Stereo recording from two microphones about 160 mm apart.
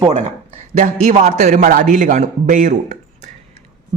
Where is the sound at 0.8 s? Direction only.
55° right (ahead or behind).